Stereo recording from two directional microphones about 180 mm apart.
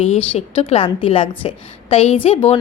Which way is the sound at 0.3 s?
35° left (ahead or behind).